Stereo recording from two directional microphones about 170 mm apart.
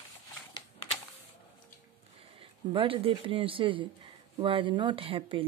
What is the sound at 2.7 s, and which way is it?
Speech, 30° right (ahead or behind).